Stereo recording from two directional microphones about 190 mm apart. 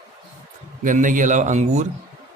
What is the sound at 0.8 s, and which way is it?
A man's voice, 45° right (ahead or behind).